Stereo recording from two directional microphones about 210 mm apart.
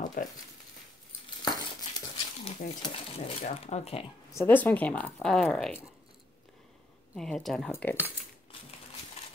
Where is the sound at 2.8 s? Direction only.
25° left (ahead or behind).